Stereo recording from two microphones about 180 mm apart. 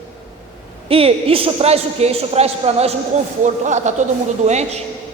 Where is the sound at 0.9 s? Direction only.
30° right (ahead or behind).